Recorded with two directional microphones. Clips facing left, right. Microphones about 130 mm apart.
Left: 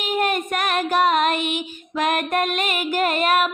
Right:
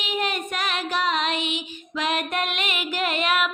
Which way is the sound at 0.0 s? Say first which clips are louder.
Left 5 dB; 50° left (ahead or behind).